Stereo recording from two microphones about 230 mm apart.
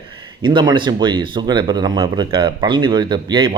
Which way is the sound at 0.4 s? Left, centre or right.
Centre.